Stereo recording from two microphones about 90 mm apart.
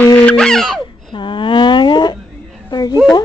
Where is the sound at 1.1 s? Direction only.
65° left (ahead or behind).